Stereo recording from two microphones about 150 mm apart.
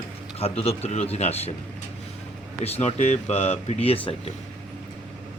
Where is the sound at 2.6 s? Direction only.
45° left (ahead or behind).